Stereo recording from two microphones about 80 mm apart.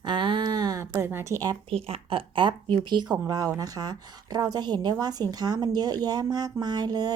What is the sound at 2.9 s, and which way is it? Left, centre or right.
Speech, right.